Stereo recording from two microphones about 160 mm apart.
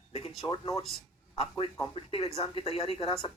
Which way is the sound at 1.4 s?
35° left (ahead or behind).